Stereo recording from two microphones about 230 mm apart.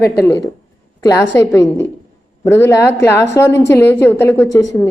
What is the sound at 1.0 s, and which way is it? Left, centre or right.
A woman's voice, centre.